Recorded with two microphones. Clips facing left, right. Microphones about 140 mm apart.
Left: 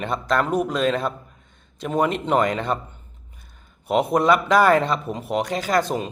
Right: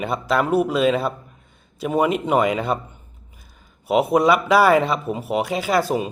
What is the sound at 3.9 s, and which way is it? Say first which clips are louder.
Speech: right 2 dB; 5° right (ahead or behind).